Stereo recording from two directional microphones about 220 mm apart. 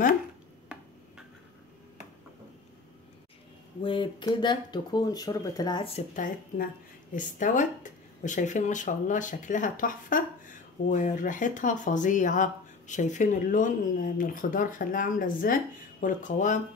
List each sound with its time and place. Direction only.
3.8 s speech: 20° left (ahead or behind)
6.1 s speech: 35° left (ahead or behind)